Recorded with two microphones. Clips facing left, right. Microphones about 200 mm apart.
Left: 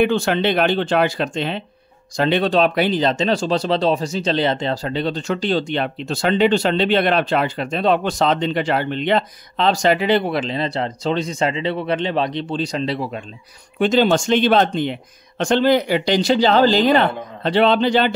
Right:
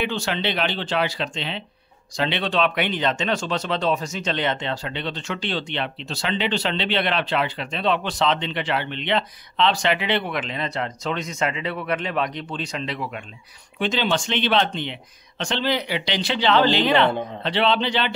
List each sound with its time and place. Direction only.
0.0 s speech: 50° left (ahead or behind); by 13.2 s 35° left (ahead or behind)
13.7 s speech: 45° left (ahead or behind)